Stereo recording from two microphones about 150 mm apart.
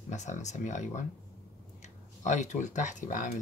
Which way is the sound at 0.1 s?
50° left (ahead or behind).